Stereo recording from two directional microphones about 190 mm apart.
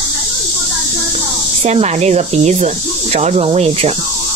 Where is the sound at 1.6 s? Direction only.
35° right (ahead or behind).